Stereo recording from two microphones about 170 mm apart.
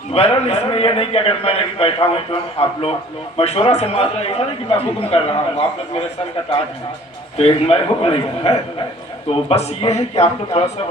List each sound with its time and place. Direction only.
0.1 s a man's voice: 35° left (ahead or behind)
7.3 s a man's voice: 35° left (ahead or behind)